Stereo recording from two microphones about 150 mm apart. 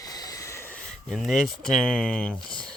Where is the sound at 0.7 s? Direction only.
Centre (ahead or behind).